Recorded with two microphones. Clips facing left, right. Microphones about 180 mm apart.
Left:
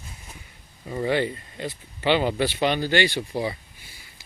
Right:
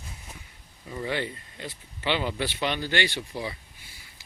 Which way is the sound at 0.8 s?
45° left (ahead or behind).